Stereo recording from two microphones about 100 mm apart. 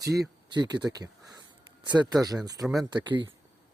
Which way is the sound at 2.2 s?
40° right (ahead or behind).